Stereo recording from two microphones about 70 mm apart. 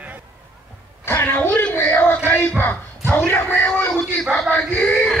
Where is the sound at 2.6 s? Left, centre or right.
Left.